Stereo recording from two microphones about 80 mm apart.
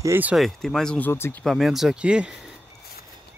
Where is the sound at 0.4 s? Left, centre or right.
Centre.